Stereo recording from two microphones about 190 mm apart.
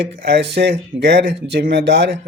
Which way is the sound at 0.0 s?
60° right (ahead or behind).